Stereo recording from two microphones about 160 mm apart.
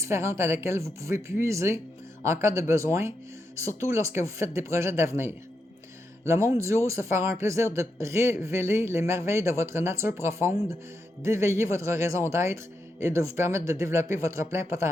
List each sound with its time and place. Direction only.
0.0 s speech: 15° right (ahead or behind)